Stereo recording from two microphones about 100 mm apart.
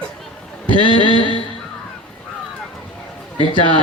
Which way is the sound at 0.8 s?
55° left (ahead or behind).